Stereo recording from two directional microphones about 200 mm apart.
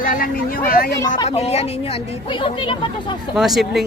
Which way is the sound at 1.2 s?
30° left (ahead or behind).